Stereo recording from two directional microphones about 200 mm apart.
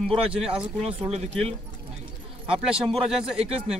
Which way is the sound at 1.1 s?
30° right (ahead or behind).